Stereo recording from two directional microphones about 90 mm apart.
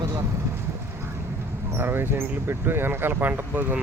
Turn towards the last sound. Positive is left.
turn(degrees=-20)  # may be behind; listen again after turning